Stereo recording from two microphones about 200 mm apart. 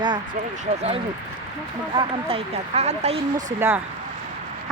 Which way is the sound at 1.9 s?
25° right (ahead or behind).